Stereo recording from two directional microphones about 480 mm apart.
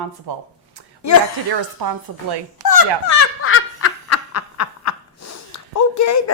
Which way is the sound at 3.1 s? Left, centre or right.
Left.